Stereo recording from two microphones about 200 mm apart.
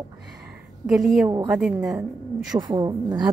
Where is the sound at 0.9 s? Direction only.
Centre (ahead or behind).